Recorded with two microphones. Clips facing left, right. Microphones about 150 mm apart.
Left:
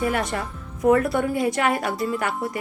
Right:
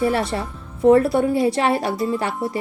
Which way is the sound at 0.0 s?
30° right (ahead or behind).